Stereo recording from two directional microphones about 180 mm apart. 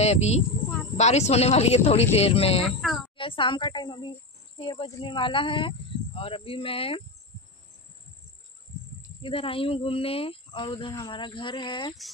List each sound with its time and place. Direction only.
0.0 s a woman's voice: 35° left (ahead or behind)
9.2 s speech: 30° left (ahead or behind)